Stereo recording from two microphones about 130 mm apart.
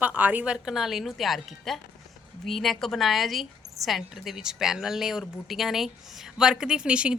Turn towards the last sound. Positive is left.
turn(degrees=-10)  # may be behind; listen again after turning